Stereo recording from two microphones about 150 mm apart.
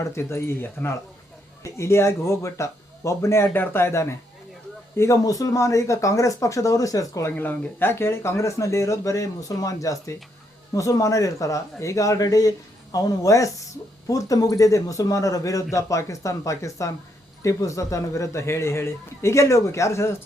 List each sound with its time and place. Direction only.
0.0 s speech: 20° left (ahead or behind)